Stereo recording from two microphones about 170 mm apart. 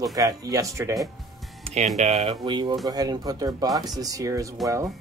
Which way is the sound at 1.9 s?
40° right (ahead or behind).